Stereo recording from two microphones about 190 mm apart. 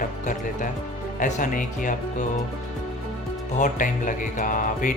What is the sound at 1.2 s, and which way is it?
Speech, 45° left (ahead or behind).